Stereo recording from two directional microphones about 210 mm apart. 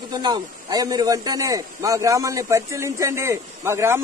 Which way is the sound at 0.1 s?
20° right (ahead or behind).